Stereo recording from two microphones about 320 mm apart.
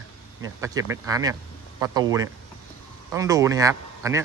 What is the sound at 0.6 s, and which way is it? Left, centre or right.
Speech, centre.